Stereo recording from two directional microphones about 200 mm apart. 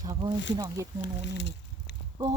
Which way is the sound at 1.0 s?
60° left (ahead or behind).